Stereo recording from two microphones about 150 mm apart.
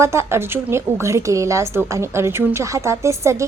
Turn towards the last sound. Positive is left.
turn(degrees=-20)  # may be behind; listen again after turning